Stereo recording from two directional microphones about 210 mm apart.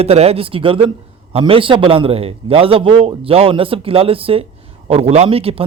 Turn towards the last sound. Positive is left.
turn(degrees=-25)  # may be behind; listen again after turning